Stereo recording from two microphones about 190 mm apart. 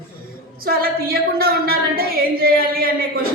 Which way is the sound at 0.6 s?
50° right (ahead or behind).